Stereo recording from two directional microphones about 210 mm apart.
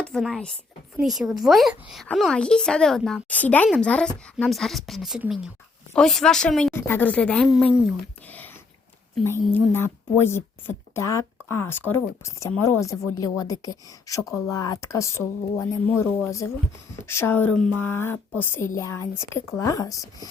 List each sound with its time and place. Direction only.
0.0 s a woman's voice: centre (ahead or behind)
9.6 s speech: 10° left (ahead or behind)